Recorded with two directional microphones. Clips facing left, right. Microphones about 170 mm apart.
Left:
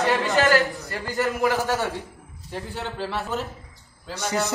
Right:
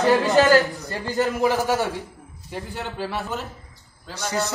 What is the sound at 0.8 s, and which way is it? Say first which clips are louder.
A man's voice: right 2 dB; 20° right (ahead or behind).